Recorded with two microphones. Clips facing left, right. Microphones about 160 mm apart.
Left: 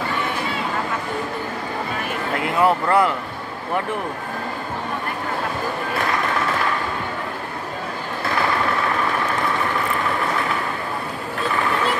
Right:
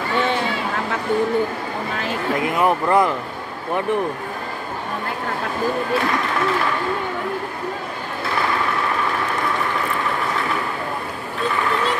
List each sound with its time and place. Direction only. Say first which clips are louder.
2.4 s speech: left 2 dB; 20° right (ahead or behind)